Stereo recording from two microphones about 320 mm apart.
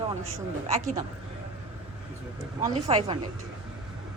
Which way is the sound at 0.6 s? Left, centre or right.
Right.